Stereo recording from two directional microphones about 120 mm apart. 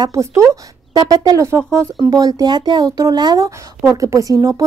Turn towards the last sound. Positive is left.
turn(degrees=-30)  # may be behind; listen again after turning